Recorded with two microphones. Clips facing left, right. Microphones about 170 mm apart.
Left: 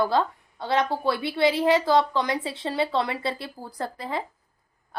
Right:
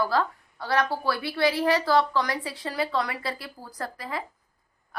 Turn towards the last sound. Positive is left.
turn(degrees=25)  # may be behind; listen again after turning